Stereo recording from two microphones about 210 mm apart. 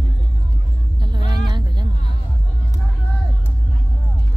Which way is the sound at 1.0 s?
20° right (ahead or behind).